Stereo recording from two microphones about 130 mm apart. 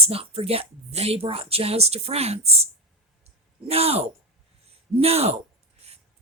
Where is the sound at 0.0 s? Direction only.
50° right (ahead or behind).